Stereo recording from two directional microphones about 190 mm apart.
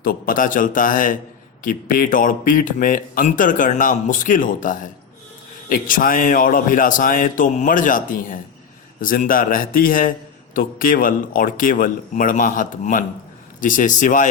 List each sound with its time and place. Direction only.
0.0 s a man's voice: 50° left (ahead or behind)